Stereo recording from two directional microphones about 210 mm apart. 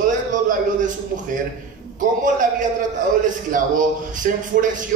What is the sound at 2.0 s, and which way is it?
A man's voice, 40° right (ahead or behind).